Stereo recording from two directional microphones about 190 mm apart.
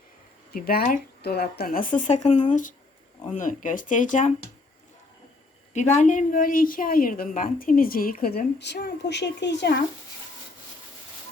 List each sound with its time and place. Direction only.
0.5 s a woman's voice: 50° left (ahead or behind)
5.7 s a woman's voice: 35° left (ahead or behind); by 9.7 s 65° left (ahead or behind)